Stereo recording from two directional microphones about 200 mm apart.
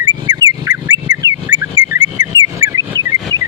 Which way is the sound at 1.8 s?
10° right (ahead or behind).